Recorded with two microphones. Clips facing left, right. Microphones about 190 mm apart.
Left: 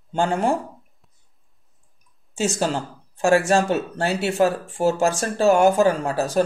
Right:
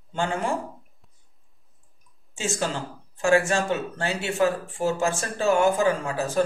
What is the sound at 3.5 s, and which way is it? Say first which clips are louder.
Speech: left 5 dB; 40° left (ahead or behind).